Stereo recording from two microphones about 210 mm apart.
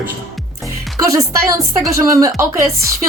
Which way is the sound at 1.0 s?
15° right (ahead or behind).